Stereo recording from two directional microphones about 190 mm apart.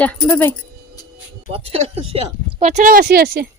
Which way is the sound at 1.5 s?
30° right (ahead or behind).